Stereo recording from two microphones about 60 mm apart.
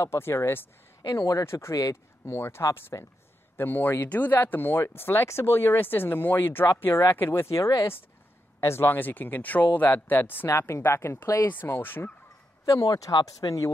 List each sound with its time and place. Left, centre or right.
0.0 s a woman's voice: left
1.0 s speech: left
1.4 s a woman's voice: left
2.9 s speech: left
3.5 s speech: left
7.4 s speech: left
10.5 s a woman's voice: left
12.6 s speech: left